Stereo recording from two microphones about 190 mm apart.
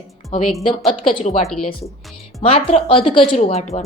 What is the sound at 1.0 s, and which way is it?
Speech, 30° left (ahead or behind).